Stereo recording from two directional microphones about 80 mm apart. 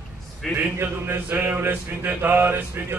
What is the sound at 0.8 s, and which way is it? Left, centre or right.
Mantra, right.